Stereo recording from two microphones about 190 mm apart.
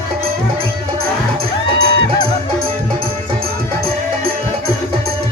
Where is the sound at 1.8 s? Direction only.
50° right (ahead or behind).